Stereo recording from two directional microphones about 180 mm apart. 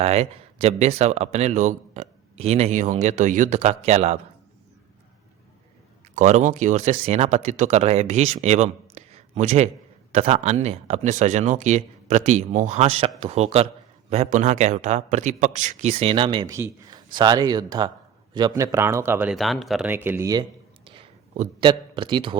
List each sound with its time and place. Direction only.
0.0 s speech: 35° right (ahead or behind)
6.1 s speech: 40° right (ahead or behind)
16.5 s speech: 15° right (ahead or behind)
19.3 s speech: centre (ahead or behind)
19.9 s speech: 10° right (ahead or behind)
20.8 s a sound: 30° right (ahead or behind)